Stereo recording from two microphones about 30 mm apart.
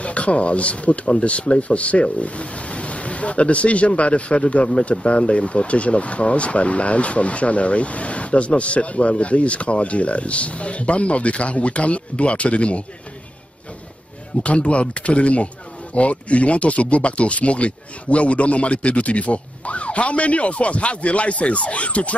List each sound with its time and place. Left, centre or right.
0.0 s speech: left
14.4 s speech: left